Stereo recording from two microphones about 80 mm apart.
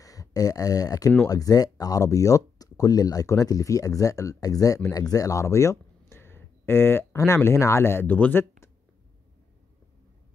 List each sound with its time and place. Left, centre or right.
0.0 s speech: left